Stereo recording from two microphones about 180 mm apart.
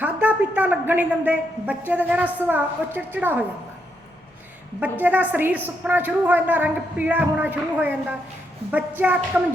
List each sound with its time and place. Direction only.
0.0 s a sound: 10° right (ahead or behind)
1.9 s a woman's voice: 10° right (ahead or behind)
4.8 s a woman's voice: 10° right (ahead or behind)